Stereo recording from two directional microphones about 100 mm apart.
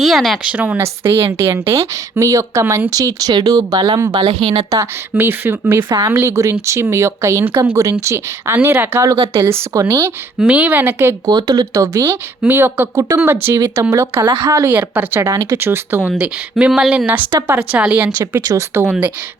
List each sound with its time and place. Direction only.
0.0 s speech: centre (ahead or behind)
0.5 s speech: 15° right (ahead or behind); by 4.0 s 45° right (ahead or behind)
4.1 s speech: 70° right (ahead or behind)
4.5 s speech: 35° right (ahead or behind)
5.1 s speech: 25° right (ahead or behind)
10.4 s speech: 10° right (ahead or behind)
11.3 s speech: 45° right (ahead or behind)
12.4 s speech: 20° right (ahead or behind)
15.2 s speech: 35° right (ahead or behind)
16.1 s speech: 10° right (ahead or behind)
17.4 s speech: 20° right (ahead or behind)
18.4 s speech: 30° right (ahead or behind)
18.9 s speech: 15° right (ahead or behind)